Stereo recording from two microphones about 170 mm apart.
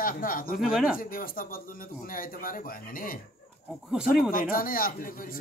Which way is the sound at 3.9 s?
5° right (ahead or behind).